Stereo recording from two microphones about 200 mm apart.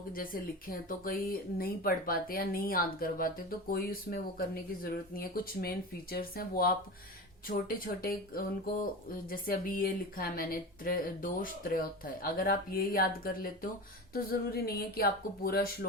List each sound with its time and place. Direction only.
0.1 s speech: 45° left (ahead or behind)